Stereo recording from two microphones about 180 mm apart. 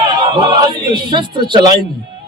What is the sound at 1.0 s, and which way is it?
Speech, 25° right (ahead or behind).